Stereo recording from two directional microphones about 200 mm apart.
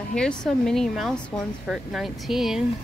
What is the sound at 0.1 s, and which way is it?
Speech, 5° left (ahead or behind).